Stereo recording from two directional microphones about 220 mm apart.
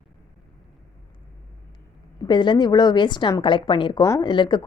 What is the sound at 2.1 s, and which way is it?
A woman's voice, 20° left (ahead or behind).